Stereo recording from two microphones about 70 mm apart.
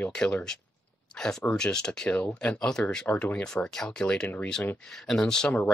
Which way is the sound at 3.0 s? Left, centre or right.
Left.